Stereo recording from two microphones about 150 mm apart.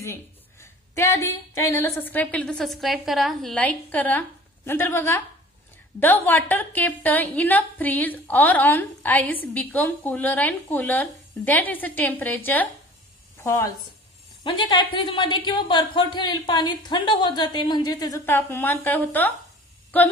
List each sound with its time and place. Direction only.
0.0 s a woman's voice: 20° left (ahead or behind)
14.4 s a woman's voice: 35° left (ahead or behind); by 19.3 s 10° left (ahead or behind)